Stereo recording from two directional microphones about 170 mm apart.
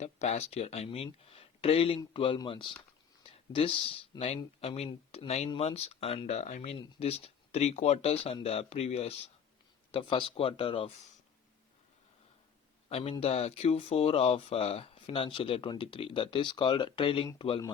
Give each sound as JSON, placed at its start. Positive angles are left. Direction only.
{"t": 0.0, "sound": "speech", "side_deg": 40}
{"t": 12.9, "sound": "speech", "side_deg": 35}